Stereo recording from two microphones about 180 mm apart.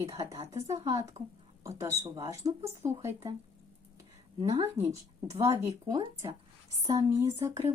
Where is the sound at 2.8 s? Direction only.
15° right (ahead or behind).